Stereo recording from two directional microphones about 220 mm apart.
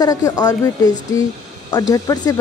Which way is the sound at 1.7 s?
15° left (ahead or behind).